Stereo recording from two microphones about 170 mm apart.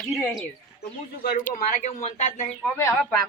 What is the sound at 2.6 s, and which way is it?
Speech, 15° left (ahead or behind).